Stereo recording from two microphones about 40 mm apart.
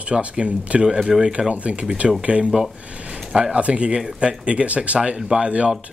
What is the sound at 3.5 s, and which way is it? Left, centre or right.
Speech, right.